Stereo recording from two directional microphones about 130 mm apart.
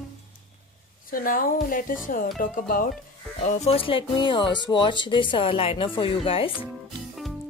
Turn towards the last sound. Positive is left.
turn(degrees=45)  # may be behind; listen again after turning